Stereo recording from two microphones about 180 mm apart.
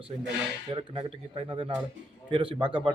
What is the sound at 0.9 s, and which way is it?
A man's voice, 30° right (ahead or behind).